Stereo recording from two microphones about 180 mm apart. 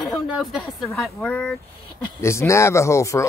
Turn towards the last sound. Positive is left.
turn(degrees=15)  # may be behind; listen again after turning